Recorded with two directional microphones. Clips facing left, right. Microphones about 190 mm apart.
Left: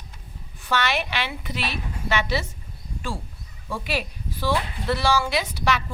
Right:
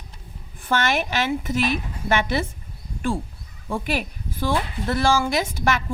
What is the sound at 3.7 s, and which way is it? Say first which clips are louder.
Speech: right 3 dB; 50° right (ahead or behind).